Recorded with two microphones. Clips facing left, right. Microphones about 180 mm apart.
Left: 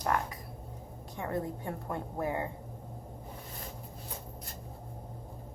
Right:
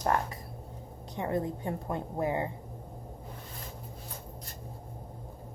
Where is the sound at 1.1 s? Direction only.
20° right (ahead or behind).